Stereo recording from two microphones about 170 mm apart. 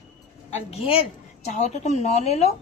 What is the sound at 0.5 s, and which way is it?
A woman's voice, 35° left (ahead or behind).